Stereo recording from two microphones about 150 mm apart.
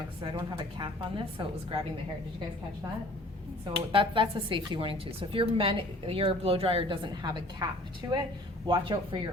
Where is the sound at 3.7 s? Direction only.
35° right (ahead or behind).